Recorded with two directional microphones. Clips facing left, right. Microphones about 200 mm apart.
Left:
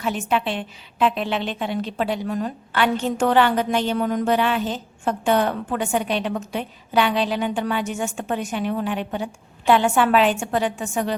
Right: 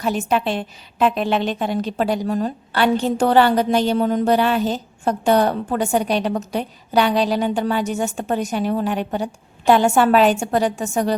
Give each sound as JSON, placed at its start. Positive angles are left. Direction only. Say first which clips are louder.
{"t": 0.0, "sound": "a woman's voice", "louder": "right 3 dB", "side_deg": -40}